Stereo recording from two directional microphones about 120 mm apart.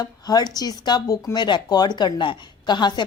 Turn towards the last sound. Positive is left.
turn(degrees=40)  # may be behind; listen again after turning